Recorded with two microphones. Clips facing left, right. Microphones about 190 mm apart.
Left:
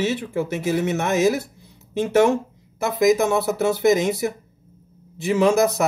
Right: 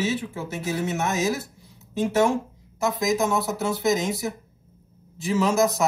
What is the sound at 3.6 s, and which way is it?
Speech, 60° left (ahead or behind).